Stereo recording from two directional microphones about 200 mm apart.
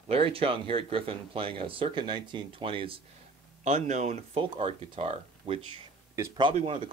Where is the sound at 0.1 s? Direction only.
30° right (ahead or behind).